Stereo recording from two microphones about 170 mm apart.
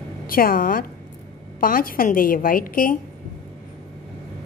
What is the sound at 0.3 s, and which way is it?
A woman's voice, 60° left (ahead or behind).